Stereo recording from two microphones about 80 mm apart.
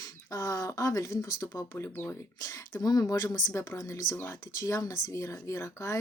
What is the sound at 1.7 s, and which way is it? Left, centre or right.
Speech, left.